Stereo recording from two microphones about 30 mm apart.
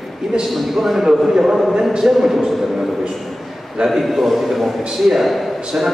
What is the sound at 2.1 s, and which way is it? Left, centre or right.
Speech, centre.